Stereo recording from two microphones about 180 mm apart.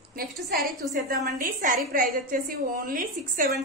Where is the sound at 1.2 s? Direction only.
50° right (ahead or behind).